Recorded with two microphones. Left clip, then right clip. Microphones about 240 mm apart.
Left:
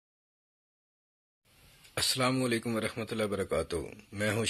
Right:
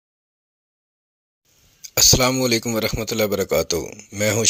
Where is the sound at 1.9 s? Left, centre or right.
Right.